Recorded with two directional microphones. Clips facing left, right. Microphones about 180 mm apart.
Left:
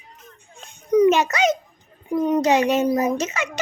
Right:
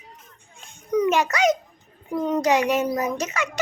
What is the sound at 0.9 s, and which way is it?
A child's voice, 20° left (ahead or behind).